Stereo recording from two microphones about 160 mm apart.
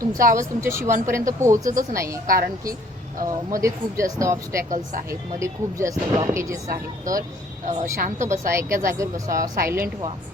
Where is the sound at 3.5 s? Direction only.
20° right (ahead or behind).